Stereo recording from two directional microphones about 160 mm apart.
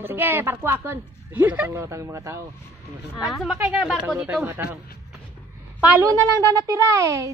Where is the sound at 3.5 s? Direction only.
10° right (ahead or behind).